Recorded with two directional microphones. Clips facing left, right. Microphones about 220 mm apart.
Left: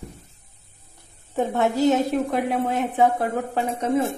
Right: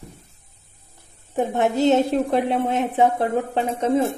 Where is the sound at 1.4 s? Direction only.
15° right (ahead or behind).